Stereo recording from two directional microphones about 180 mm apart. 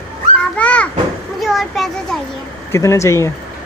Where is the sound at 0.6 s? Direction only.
5° left (ahead or behind).